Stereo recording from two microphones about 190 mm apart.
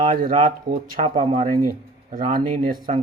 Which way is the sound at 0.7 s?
30° right (ahead or behind).